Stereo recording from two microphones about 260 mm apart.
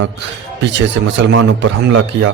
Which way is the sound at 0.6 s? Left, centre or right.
Right.